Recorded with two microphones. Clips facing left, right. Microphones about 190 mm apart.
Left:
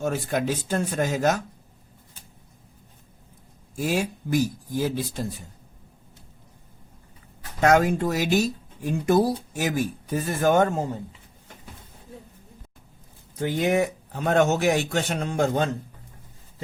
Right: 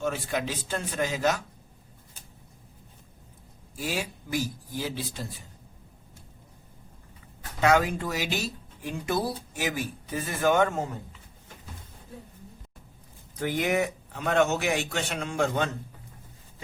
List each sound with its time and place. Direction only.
0.0 s speech: 45° left (ahead or behind)
3.8 s speech: 50° left (ahead or behind)
7.6 s speech: 45° left (ahead or behind)
13.4 s a man's voice: 30° left (ahead or behind)